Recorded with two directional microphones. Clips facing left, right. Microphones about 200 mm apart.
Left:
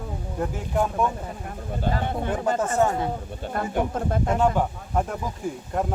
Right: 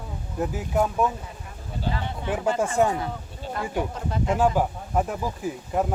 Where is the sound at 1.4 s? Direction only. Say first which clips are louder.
Left 3 dB; 50° left (ahead or behind).